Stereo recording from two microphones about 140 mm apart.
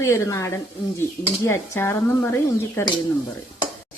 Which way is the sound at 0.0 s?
20° left (ahead or behind).